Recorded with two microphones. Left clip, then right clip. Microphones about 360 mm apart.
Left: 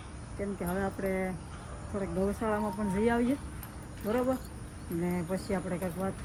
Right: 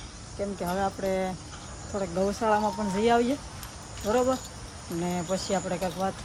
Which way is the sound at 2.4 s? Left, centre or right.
Centre.